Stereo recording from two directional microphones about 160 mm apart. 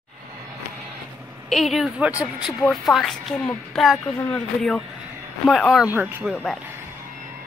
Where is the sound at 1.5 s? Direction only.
Centre (ahead or behind).